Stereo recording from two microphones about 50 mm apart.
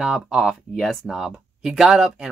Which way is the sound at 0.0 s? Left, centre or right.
Centre.